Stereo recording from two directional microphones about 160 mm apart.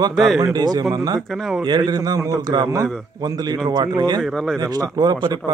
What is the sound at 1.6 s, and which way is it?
Speech, 25° right (ahead or behind).